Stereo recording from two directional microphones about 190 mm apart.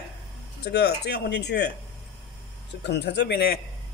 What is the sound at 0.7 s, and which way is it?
Speech, 60° left (ahead or behind).